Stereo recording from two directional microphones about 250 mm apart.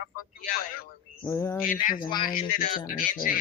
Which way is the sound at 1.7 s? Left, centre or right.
Left.